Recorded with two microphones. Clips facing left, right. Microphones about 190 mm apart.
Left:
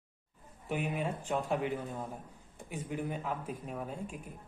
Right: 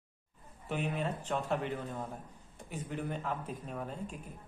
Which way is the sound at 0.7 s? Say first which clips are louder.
Left 1 dB; 10° left (ahead or behind).